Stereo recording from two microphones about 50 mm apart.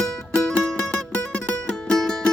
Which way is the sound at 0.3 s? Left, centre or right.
Centre.